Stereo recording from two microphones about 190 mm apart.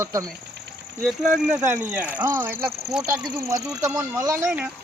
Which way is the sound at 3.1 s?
20° right (ahead or behind).